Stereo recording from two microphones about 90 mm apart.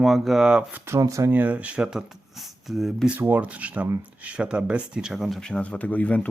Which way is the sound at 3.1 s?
20° right (ahead or behind).